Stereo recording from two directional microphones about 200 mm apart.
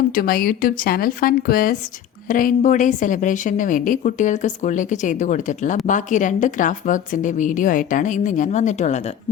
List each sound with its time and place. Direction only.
0.1 s a woman's voice: 45° left (ahead or behind)